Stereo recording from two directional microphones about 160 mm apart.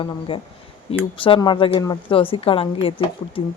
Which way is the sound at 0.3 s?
35° left (ahead or behind).